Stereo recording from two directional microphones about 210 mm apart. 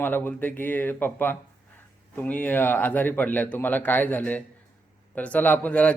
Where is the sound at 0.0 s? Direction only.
10° left (ahead or behind).